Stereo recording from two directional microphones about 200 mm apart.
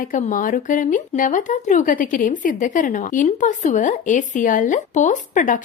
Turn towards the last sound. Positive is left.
turn(degrees=40)  # may be behind; listen again after turning